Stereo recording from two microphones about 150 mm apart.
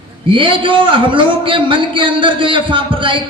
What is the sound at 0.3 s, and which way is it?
A man's voice, 35° right (ahead or behind).